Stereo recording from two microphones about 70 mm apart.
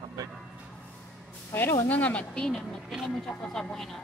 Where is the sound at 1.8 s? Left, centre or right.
Left.